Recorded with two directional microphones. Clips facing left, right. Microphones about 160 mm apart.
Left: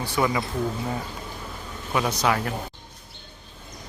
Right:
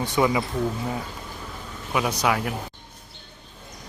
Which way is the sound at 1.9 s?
10° right (ahead or behind).